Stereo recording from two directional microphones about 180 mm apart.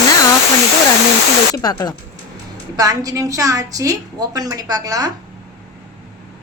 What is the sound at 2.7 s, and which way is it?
A woman's voice, 20° right (ahead or behind).